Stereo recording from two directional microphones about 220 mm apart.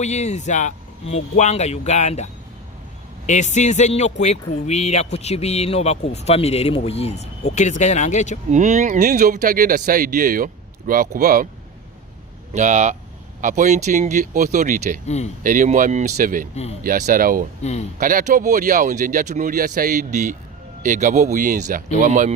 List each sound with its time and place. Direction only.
0.0 s speech: 30° left (ahead or behind)
3.2 s speech: 30° left (ahead or behind)
8.4 s speech: 35° right (ahead or behind)
12.5 s speech: 35° right (ahead or behind)
15.0 s speech: 30° left (ahead or behind)
15.4 s speech: 35° right (ahead or behind)
17.6 s speech: 30° left (ahead or behind)
18.0 s speech: 40° right (ahead or behind)